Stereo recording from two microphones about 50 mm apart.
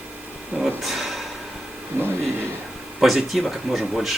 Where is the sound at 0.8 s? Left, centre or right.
Centre.